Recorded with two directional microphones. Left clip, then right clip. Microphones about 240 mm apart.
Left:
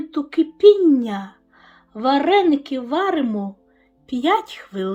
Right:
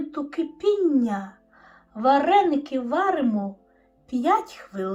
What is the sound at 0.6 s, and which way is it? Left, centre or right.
A woman's voice, left.